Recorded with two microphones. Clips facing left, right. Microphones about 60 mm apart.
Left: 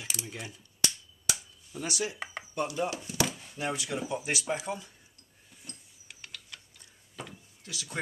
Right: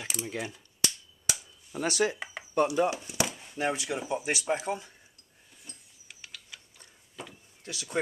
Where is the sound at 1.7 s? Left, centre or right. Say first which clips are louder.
Right 6 dB; right.